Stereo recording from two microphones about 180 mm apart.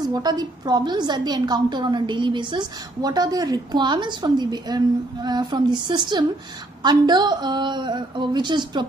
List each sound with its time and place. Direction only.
0.0 s a woman's voice: 20° right (ahead or behind)